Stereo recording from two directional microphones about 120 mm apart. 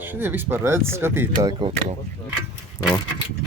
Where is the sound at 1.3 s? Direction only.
40° right (ahead or behind).